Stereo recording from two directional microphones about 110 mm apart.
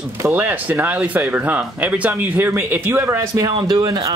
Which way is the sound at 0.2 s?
20° right (ahead or behind).